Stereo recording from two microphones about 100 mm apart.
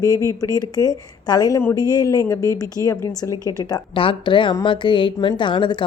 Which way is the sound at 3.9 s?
60° left (ahead or behind).